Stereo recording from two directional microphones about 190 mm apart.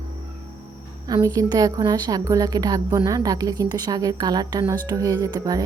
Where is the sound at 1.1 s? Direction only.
20° right (ahead or behind).